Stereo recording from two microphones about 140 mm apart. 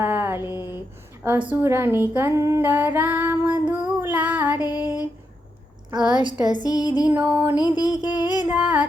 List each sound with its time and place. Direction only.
0.0 s a sound: 15° right (ahead or behind)
0.4 s a sound: 25° left (ahead or behind)
1.6 s female singing: 15° right (ahead or behind)
4.5 s music: 25° left (ahead or behind)
5.9 s a woman's voice: 30° right (ahead or behind)
6.6 s music: 25° left (ahead or behind)
7.2 s female singing: 10° right (ahead or behind)
7.5 s music: 30° left (ahead or behind)
8.4 s female singing: 10° right (ahead or behind)